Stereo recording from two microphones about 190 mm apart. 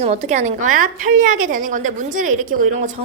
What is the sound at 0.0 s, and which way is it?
A woman's voice, 35° right (ahead or behind).